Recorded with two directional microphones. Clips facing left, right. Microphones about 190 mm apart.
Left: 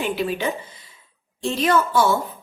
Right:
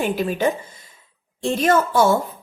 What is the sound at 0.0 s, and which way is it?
A woman's voice, 45° right (ahead or behind).